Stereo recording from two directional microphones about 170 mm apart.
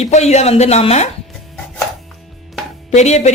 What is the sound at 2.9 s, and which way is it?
Speech, 40° left (ahead or behind).